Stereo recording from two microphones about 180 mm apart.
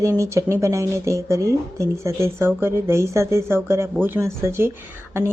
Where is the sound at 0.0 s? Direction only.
15° right (ahead or behind).